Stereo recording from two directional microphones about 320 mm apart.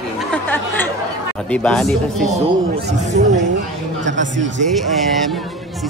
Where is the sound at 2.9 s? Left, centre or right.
Right.